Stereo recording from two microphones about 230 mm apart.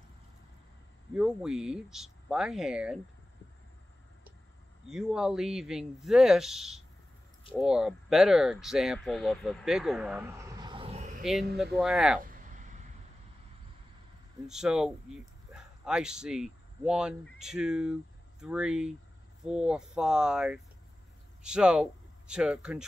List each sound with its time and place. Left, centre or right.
1.1 s speech: centre
4.8 s speech: centre; by 11.2 s right
11.5 s speech: centre
12.2 s a sound: right
14.5 s speech: centre